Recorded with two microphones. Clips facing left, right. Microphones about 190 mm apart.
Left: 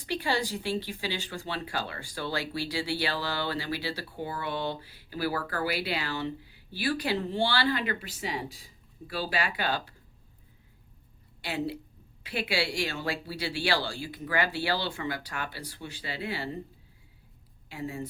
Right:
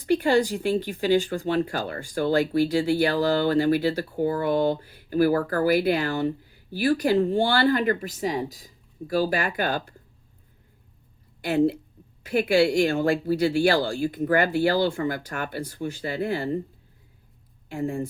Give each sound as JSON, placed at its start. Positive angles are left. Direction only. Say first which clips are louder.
{"t": 0.0, "sound": "speech", "louder": "right 10 dB", "side_deg": -50}
{"t": 11.4, "sound": "speech", "louder": "right 11 dB", "side_deg": -50}
{"t": 17.7, "sound": "speech", "louder": "right 8 dB", "side_deg": -50}